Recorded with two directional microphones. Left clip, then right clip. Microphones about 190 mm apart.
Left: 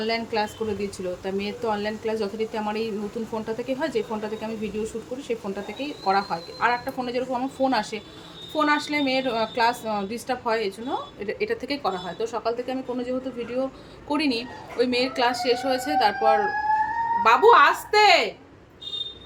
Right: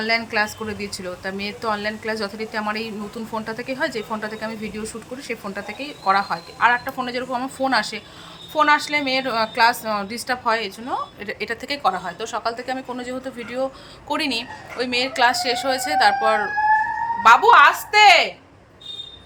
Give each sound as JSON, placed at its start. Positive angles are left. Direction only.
{"t": 0.0, "sound": "a woman's voice", "side_deg": 0}